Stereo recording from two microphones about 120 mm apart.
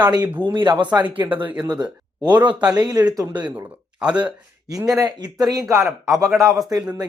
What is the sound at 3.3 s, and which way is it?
Speech, 10° right (ahead or behind).